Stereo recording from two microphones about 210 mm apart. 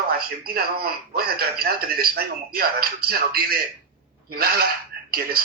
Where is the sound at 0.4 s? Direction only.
45° right (ahead or behind).